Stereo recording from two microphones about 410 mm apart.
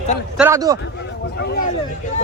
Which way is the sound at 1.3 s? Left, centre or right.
Left.